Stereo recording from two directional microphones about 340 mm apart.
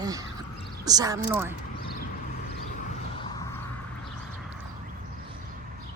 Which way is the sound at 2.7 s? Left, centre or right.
Centre.